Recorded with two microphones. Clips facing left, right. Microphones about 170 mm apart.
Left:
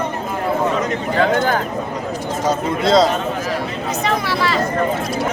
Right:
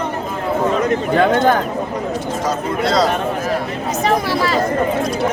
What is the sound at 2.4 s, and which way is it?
Speech, 25° left (ahead or behind).